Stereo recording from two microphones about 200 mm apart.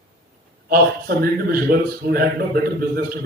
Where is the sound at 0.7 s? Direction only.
45° right (ahead or behind).